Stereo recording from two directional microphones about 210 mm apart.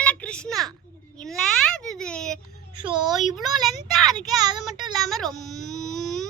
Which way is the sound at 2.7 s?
25° right (ahead or behind).